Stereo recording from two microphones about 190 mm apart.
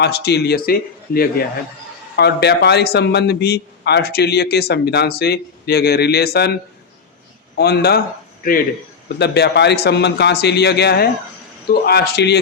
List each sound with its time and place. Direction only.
0.0 s a man's voice: 60° left (ahead or behind)
7.5 s a man's voice: 60° left (ahead or behind)
9.1 s a man's voice: 60° left (ahead or behind)